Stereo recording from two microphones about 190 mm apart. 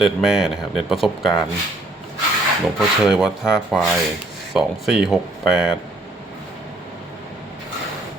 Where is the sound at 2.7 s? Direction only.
5° right (ahead or behind).